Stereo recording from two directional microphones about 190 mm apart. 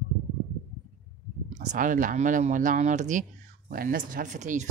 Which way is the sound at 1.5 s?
45° right (ahead or behind).